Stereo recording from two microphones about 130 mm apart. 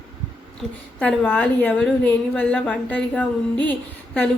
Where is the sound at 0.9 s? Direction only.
10° left (ahead or behind).